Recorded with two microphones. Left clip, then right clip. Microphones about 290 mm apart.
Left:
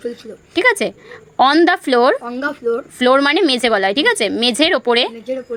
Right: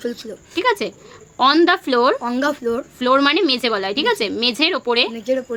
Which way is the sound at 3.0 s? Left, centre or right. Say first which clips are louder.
Left 3 dB; centre.